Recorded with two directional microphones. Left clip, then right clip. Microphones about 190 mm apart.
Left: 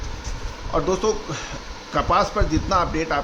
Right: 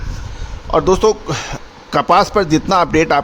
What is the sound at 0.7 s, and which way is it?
A man's voice, 65° right (ahead or behind).